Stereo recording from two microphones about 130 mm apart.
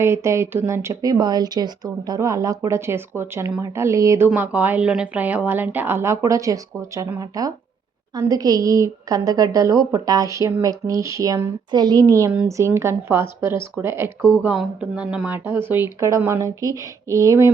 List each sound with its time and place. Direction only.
0.0 s speech: 20° right (ahead or behind)
4.3 s a woman's voice: 10° right (ahead or behind)
14.4 s a woman's voice: 10° right (ahead or behind)
15.4 s speech: 20° right (ahead or behind)